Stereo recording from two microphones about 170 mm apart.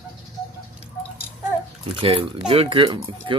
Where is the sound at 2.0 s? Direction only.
30° right (ahead or behind).